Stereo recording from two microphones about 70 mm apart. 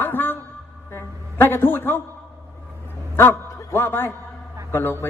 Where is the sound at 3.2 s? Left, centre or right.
Left.